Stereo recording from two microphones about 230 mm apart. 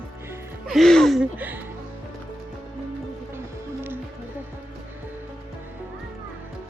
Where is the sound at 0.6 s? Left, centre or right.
Centre.